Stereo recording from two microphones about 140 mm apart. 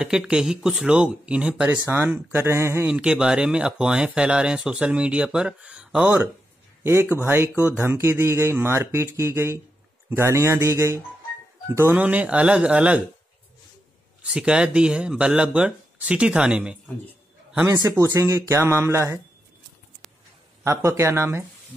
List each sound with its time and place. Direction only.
0.0 s speech: 5° right (ahead or behind)
2.9 s speech: 5° right (ahead or behind)
6.8 s a man's voice: 15° right (ahead or behind)
14.2 s speech: 5° right (ahead or behind)
17.6 s a man's voice: 20° right (ahead or behind)
20.6 s a man's voice: 20° right (ahead or behind)